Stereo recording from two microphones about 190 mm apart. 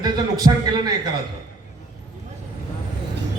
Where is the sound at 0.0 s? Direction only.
20° right (ahead or behind).